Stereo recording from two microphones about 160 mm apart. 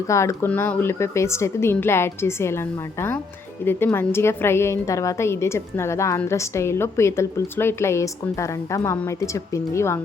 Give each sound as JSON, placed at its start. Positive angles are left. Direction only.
{"t": 0.1, "sound": "a woman's voice", "side_deg": 20}